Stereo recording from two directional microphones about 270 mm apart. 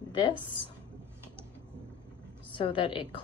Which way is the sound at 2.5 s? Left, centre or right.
Centre.